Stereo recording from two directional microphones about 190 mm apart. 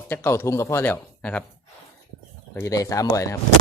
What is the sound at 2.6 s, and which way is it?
Speech, 15° left (ahead or behind).